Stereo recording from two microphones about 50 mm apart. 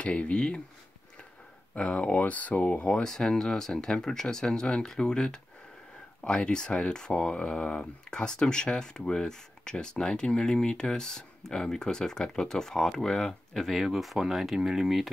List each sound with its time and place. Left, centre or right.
0.0 s speech: left
1.8 s speech: left
2.9 s speech: centre